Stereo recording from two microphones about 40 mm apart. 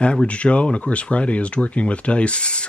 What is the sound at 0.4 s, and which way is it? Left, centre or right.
Speech, left.